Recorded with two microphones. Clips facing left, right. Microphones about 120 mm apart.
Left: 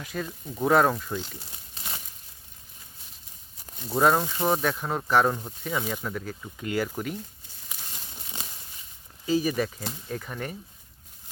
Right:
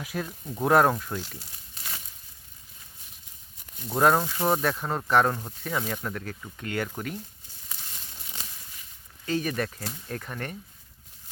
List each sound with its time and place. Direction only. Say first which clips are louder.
0.0 s speech: even; 5° right (ahead or behind)
1.4 s crumpling: left 1 dB; 25° left (ahead or behind)
3.8 s speech: even; centre (ahead or behind)
9.2 s speech: left 3 dB; 5° left (ahead or behind)